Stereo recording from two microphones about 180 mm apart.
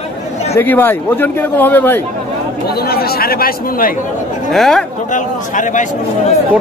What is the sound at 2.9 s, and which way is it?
Speech, 60° left (ahead or behind).